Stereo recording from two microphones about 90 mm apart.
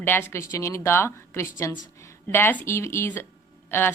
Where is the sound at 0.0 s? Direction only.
25° left (ahead or behind).